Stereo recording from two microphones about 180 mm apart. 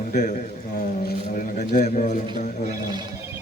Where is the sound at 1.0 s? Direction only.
45° left (ahead or behind).